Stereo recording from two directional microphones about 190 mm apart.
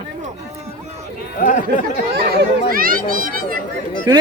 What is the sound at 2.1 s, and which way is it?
Speech, 55° right (ahead or behind).